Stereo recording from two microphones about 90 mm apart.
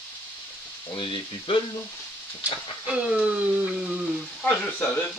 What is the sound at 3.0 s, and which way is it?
Speech, 15° right (ahead or behind).